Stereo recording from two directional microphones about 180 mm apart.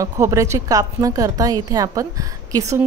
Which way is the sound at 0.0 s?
15° right (ahead or behind).